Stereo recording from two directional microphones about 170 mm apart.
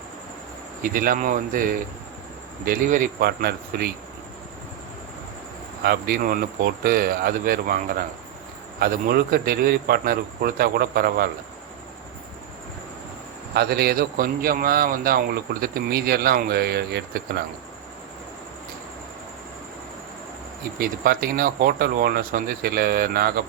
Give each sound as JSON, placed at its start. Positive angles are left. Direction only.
{"t": 0.8, "sound": "a man's voice", "side_deg": -55}
{"t": 5.8, "sound": "a man's voice", "side_deg": -65}
{"t": 13.5, "sound": "a man's voice", "side_deg": -70}
{"t": 20.7, "sound": "a man's voice", "side_deg": -60}